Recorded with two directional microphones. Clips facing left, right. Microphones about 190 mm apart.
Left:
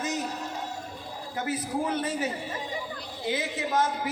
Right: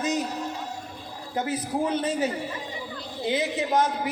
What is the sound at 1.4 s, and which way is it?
A man's voice, 20° right (ahead or behind).